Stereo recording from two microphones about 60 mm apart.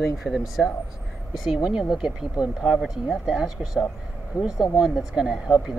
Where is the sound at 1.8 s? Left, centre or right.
Centre.